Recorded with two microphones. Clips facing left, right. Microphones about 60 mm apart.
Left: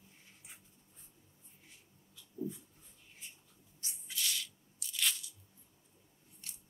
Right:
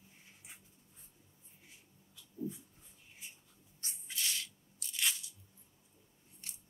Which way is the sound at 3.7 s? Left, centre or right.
Right.